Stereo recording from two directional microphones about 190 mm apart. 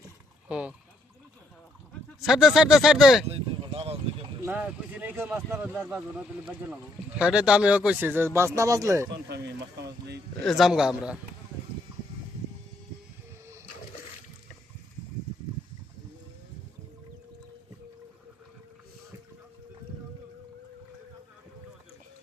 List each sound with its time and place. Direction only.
0.4 s a sound: 5° right (ahead or behind)
2.2 s speech: centre (ahead or behind)
3.2 s a sound: 30° right (ahead or behind)
4.4 s a man's voice: 10° right (ahead or behind)
9.1 s speech: 60° right (ahead or behind)
10.4 s speech: centre (ahead or behind)